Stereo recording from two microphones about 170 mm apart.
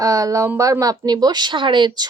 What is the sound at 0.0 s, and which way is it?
A woman's voice, 20° right (ahead or behind).